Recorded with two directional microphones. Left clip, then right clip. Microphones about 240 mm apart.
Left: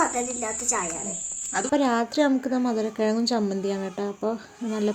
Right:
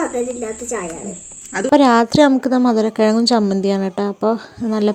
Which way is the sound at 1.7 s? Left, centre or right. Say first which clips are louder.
Right 12 dB; right.